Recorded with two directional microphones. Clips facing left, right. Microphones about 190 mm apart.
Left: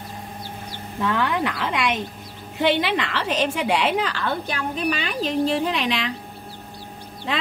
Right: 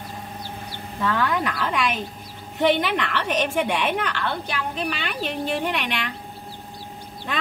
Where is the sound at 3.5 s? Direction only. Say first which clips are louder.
Left 1 dB; 75° left (ahead or behind).